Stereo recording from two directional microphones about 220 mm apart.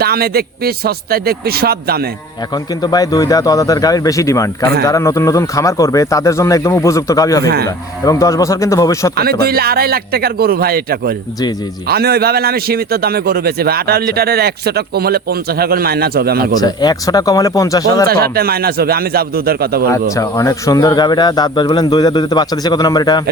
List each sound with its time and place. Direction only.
0.0 s a man's voice: 45° right (ahead or behind)
2.8 s speech: 15° left (ahead or behind)
7.4 s a man's voice: 45° right (ahead or behind)
8.0 s speech: 15° left (ahead or behind)
9.1 s a man's voice: 45° right (ahead or behind)
16.6 s speech: 15° left (ahead or behind)
18.1 s a man's voice: 45° right (ahead or behind)
19.9 s speech: 15° left (ahead or behind)